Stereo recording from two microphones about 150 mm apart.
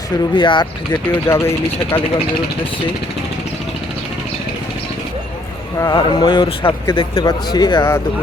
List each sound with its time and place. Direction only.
0.3 s speech: 30° left (ahead or behind)
1.1 s speech: 15° left (ahead or behind)
5.8 s a man's voice: 30° left (ahead or behind)